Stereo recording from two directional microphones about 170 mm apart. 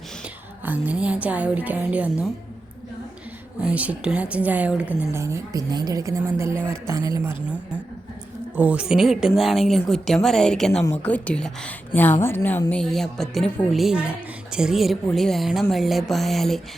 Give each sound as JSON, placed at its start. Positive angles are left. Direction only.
{"t": 0.6, "sound": "speech", "side_deg": -10}
{"t": 3.6, "sound": "speech", "side_deg": -10}
{"t": 8.5, "sound": "a woman's voice", "side_deg": -10}